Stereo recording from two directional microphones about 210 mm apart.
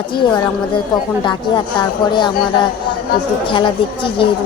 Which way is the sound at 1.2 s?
20° left (ahead or behind).